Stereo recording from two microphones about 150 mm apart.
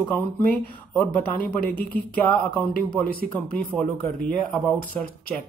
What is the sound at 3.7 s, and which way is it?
Speech, centre (ahead or behind).